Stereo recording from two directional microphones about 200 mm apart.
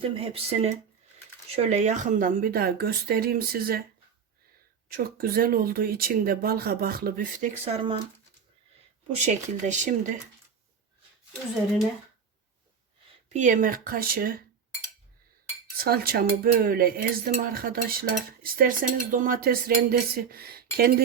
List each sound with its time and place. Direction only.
0.1 s speech: 30° right (ahead or behind)
1.5 s dishes: 30° right (ahead or behind); by 3.8 s 50° right (ahead or behind)
4.9 s dishes: 45° right (ahead or behind); by 8.0 s 25° right (ahead or behind)
9.1 s speech: 35° right (ahead or behind)
13.3 s dishes: 40° right (ahead or behind)
15.8 s dishes: 50° right (ahead or behind)